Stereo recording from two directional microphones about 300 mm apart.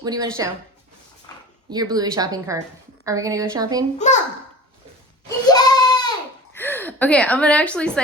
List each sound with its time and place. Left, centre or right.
0.0 s speech: centre
1.7 s speech: centre
3.9 s a child's voice: left
5.5 s a sound: centre